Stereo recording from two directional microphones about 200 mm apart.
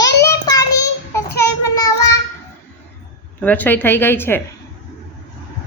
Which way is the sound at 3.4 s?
10° left (ahead or behind).